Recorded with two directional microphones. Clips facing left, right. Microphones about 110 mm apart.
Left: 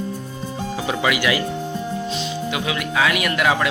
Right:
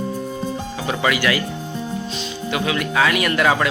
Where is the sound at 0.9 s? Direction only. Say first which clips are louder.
Right 1 dB; 10° left (ahead or behind).